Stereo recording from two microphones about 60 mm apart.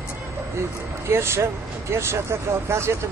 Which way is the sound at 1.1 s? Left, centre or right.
Right.